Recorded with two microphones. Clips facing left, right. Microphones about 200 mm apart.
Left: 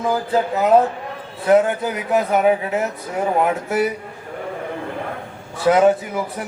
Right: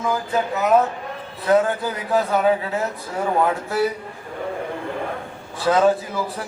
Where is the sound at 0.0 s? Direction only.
30° left (ahead or behind).